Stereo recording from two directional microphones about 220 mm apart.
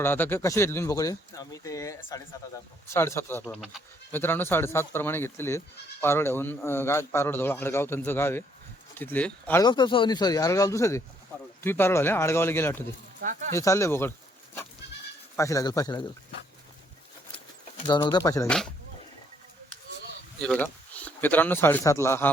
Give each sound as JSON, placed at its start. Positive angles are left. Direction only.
{"t": 0.0, "sound": "speech", "side_deg": 10}
{"t": 3.4, "sound": "speech", "side_deg": 0}
{"t": 9.6, "sound": "speech", "side_deg": 20}
{"t": 15.4, "sound": "speech", "side_deg": 15}
{"t": 17.8, "sound": "speech", "side_deg": 20}
{"t": 20.4, "sound": "speech", "side_deg": 5}